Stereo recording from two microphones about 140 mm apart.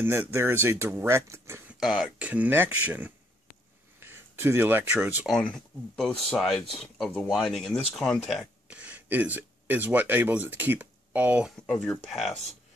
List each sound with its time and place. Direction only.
0.0 s speech: 15° right (ahead or behind)
1.7 s speech: 5° right (ahead or behind)
5.3 s speech: 5° left (ahead or behind); by 11.5 s 10° right (ahead or behind)
11.6 s speech: 5° left (ahead or behind)